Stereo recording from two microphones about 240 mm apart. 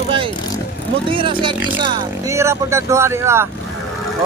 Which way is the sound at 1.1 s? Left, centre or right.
Right.